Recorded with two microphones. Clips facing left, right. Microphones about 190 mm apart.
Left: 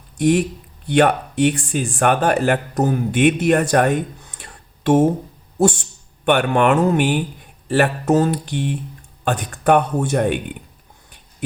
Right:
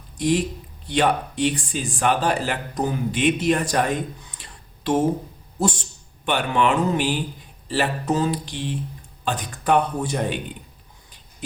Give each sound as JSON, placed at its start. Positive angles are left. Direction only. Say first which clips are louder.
{"t": 0.2, "sound": "speech", "louder": "left 5 dB", "side_deg": 55}
{"t": 6.2, "sound": "speech", "louder": "left 5 dB", "side_deg": 55}